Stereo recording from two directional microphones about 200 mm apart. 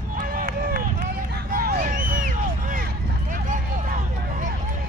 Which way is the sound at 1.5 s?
45° right (ahead or behind).